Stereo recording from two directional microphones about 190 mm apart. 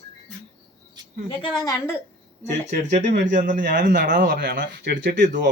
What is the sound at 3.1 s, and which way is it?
Speech, 65° right (ahead or behind).